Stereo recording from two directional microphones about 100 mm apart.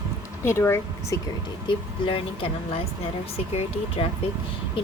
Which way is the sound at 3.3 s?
85° left.